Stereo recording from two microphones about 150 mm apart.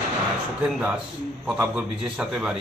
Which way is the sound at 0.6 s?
10° right (ahead or behind).